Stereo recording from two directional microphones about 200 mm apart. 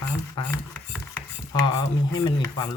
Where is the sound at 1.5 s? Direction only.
20° left (ahead or behind).